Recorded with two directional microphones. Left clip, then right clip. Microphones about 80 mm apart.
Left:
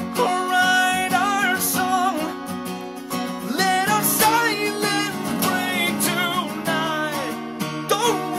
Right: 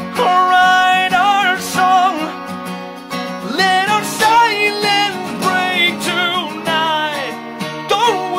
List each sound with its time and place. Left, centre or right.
0.2 s music: right
3.5 s music: right